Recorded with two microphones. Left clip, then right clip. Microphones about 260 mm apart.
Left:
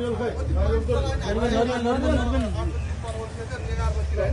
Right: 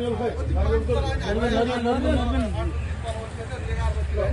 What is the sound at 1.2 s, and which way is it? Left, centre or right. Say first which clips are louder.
Speech: even; left.